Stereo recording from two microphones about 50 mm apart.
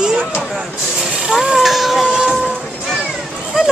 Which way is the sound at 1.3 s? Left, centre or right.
Centre.